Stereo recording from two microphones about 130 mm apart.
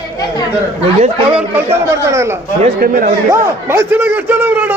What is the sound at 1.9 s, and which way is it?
Speech, 25° right (ahead or behind).